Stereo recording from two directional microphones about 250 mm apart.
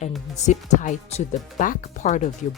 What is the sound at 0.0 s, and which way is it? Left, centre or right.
Speech, left.